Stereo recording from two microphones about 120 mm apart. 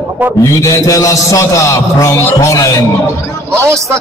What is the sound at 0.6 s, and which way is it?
A man's voice, 30° left (ahead or behind).